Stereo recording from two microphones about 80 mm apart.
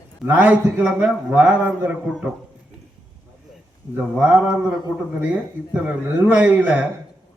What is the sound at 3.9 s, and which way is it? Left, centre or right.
A man's voice, centre.